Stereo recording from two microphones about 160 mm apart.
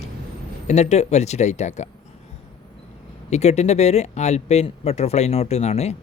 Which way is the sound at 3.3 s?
45° left (ahead or behind).